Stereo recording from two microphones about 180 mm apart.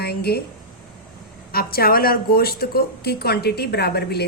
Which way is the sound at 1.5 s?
55° left (ahead or behind).